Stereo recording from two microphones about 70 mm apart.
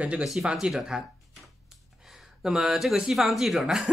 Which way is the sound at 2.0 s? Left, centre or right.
Centre.